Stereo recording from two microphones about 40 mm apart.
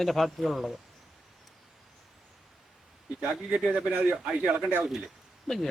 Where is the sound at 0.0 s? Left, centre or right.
Centre.